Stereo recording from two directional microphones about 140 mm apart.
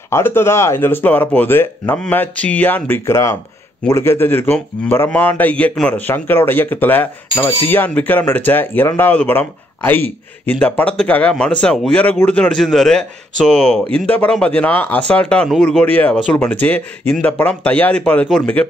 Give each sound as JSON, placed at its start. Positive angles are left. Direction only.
{"t": 0.1, "sound": "a man's voice", "side_deg": 15}